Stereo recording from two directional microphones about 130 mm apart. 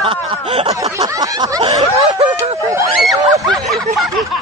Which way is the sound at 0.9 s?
25° right (ahead or behind).